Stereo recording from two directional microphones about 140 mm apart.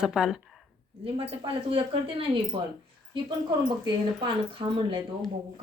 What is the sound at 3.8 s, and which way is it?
Speech, 35° right (ahead or behind).